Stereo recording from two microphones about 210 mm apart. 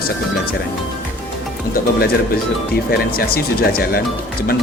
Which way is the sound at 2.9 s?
45° left (ahead or behind).